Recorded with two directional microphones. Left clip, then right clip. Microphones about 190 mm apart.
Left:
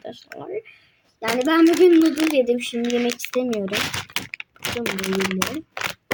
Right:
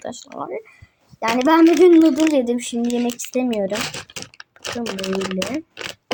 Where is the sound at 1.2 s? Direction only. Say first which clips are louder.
Right 3 dB; 5° right (ahead or behind).